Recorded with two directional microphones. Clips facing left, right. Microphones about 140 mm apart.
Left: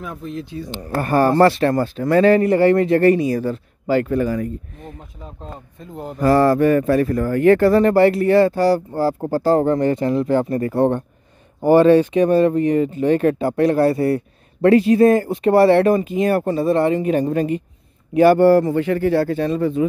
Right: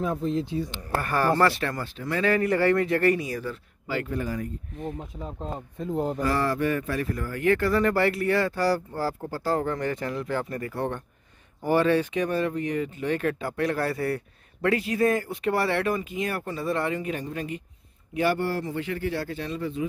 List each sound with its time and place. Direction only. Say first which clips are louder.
0.0 s speech: right 3 dB; 25° right (ahead or behind)
1.0 s speech: left 9 dB; 30° left (ahead or behind)
2.3 s speech: left 8 dB; 25° left (ahead or behind); by 4.1 s 40° left (ahead or behind)
4.1 s speech: left 10 dB; 80° left
6.2 s speech: left 14 dB; 45° left (ahead or behind); by 9.1 s 20° left (ahead or behind)
9.2 s speech: left 12 dB; 35° left (ahead or behind)
17.2 s speech: left 13 dB; 45° left (ahead or behind)